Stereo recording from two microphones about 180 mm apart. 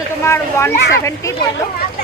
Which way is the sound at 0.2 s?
15° left (ahead or behind).